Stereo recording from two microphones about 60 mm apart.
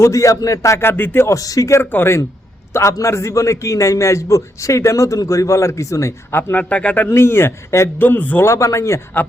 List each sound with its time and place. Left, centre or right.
0.0 s a man's voice: left
1.3 s speech: left
1.8 s a man's voice: left
2.7 s a man's voice: left
6.3 s a man's voice: left
7.1 s a man's voice: left
7.9 s a man's voice: left
8.4 s a man's voice: left